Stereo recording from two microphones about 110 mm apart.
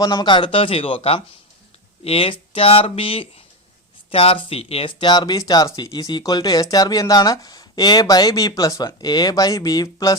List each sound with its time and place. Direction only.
0.0 s speech: 35° left (ahead or behind)